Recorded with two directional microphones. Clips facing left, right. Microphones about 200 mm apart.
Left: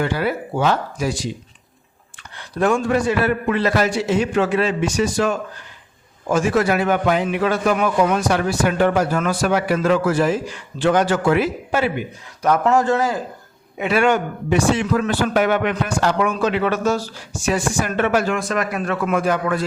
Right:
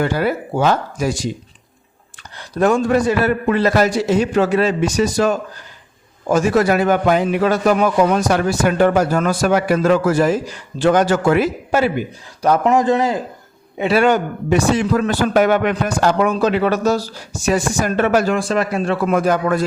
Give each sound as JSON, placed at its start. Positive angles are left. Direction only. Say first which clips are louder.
{"t": 0.0, "sound": "speech", "louder": "right 3 dB", "side_deg": -45}
{"t": 2.4, "sound": "a man's voice", "louder": "right 3 dB", "side_deg": -40}
{"t": 12.6, "sound": "a man's voice", "louder": "right 2 dB", "side_deg": -20}
{"t": 13.7, "sound": "a man's voice", "louder": "right 3 dB", "side_deg": -35}